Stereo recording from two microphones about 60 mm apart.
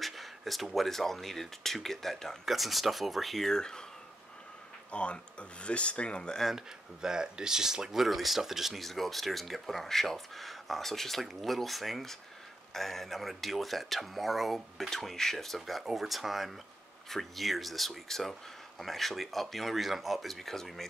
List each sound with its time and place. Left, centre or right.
0.0 s speech: centre
4.9 s speech: centre
6.5 s speech: centre